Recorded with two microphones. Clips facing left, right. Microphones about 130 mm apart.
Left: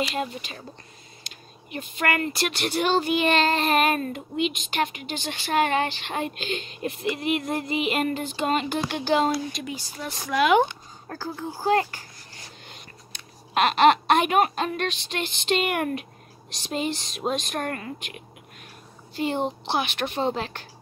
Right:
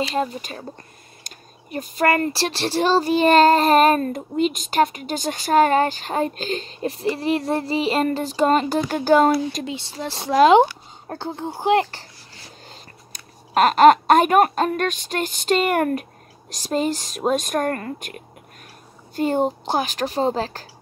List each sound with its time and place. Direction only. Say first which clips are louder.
0.0 s speech: right 5 dB; 35° right (ahead or behind)
9.7 s speech: right 5 dB; 25° right (ahead or behind)
12.6 s a sound: right 2 dB; 35° right (ahead or behind)
13.6 s speech: right 6 dB; 45° right (ahead or behind)